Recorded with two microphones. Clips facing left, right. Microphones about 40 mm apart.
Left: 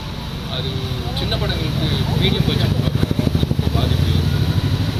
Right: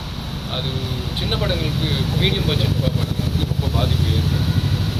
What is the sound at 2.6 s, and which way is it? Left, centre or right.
Vehicle, left.